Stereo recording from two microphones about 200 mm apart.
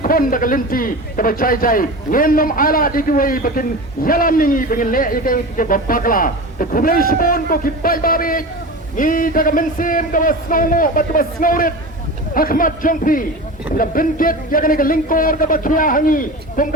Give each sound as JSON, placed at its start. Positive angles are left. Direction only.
{"t": 0.0, "sound": "a man's voice", "side_deg": 45}